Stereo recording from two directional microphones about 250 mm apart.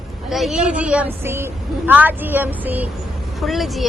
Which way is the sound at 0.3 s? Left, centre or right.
Centre.